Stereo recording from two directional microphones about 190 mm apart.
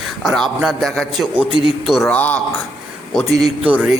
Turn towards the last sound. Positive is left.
turn(degrees=-5)  # may be behind; listen again after turning